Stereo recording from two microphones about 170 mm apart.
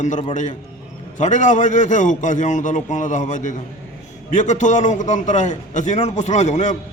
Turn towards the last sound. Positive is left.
turn(degrees=45)  # may be behind; listen again after turning